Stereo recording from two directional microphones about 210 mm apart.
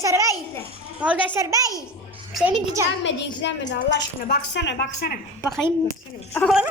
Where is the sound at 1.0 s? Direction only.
5° right (ahead or behind).